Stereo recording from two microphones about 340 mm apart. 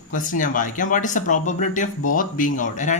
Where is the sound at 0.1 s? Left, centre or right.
Left.